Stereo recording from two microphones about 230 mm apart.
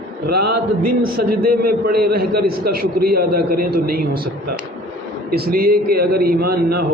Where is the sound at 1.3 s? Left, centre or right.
Right.